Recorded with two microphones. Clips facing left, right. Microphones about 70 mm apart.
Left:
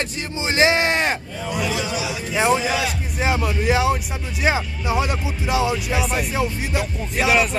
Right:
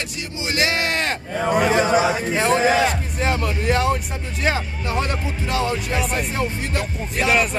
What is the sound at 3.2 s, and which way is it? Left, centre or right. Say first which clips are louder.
Speech: left 2 dB; centre.